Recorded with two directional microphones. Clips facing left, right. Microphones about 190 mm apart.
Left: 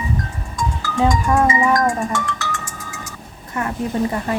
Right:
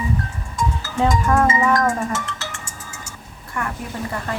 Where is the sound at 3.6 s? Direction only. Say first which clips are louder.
Left 7 dB; 20° left (ahead or behind).